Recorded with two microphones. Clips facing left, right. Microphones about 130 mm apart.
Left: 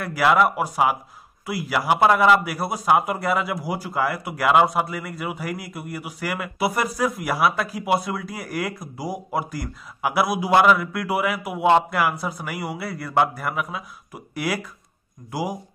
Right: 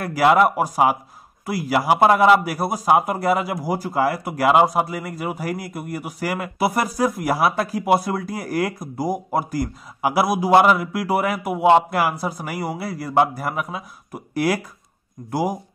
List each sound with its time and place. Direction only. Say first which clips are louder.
0.1 s a man's voice: right 3 dB; 35° right (ahead or behind)
2.4 s a man's voice: right 2 dB; 40° right (ahead or behind)
3.6 s a man's voice: right 4 dB; 40° right (ahead or behind)
4.5 s a man's voice: right 2 dB; 30° right (ahead or behind)
10.5 s speech: right 2 dB; 25° right (ahead or behind)
11.1 s speech: right 2 dB; 45° right (ahead or behind)
11.5 s speech: right 3 dB; 25° right (ahead or behind)
11.9 s a man's voice: right 2 dB; 35° right (ahead or behind)